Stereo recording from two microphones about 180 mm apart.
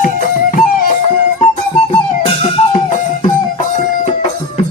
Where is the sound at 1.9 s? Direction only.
30° left (ahead or behind).